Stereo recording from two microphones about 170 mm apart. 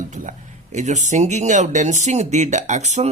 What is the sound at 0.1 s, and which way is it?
Speech, 45° right (ahead or behind).